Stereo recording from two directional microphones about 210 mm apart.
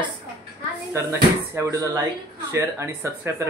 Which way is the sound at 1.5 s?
15° right (ahead or behind).